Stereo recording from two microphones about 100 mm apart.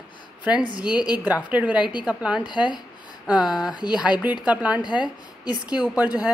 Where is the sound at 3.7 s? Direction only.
45° left (ahead or behind).